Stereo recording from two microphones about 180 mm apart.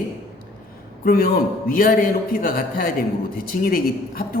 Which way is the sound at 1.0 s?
55° left (ahead or behind).